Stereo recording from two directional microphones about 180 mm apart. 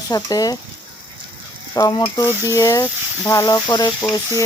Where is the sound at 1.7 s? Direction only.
20° left (ahead or behind).